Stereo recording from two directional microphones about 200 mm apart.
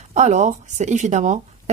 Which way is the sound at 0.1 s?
35° right (ahead or behind).